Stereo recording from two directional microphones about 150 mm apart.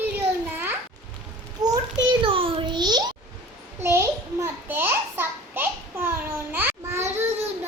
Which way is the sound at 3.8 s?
20° right (ahead or behind).